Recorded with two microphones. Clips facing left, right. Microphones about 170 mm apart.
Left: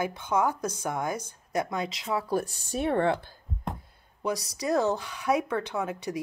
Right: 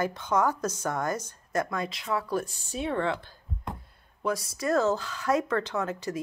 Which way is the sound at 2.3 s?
50° left (ahead or behind).